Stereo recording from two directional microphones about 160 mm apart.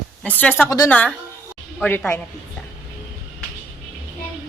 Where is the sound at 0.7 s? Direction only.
20° left (ahead or behind).